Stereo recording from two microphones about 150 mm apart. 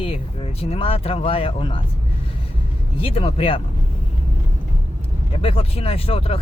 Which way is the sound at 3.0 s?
35° left (ahead or behind).